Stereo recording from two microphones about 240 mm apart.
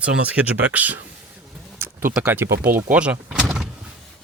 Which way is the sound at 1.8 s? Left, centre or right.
Centre.